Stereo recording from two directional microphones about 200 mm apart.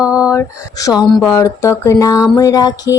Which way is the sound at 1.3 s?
15° left (ahead or behind).